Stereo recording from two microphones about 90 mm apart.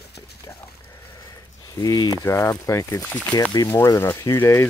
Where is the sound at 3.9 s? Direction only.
30° left (ahead or behind).